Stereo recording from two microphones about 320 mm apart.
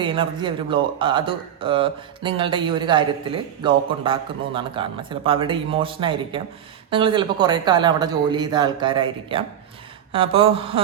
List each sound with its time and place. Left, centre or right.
0.0 s speech: centre